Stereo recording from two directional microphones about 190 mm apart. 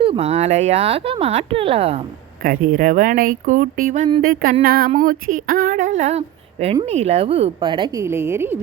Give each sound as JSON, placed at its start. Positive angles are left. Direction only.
{"t": 0.0, "sound": "speech", "side_deg": -35}
{"t": 2.4, "sound": "speech", "side_deg": -50}
{"t": 4.6, "sound": "a sound", "side_deg": -55}
{"t": 4.9, "sound": "a woman's voice", "side_deg": -45}